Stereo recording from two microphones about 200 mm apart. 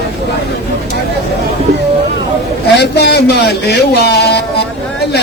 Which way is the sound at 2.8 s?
55° left (ahead or behind).